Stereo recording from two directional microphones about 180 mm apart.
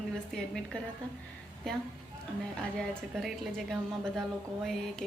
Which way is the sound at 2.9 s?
Centre (ahead or behind).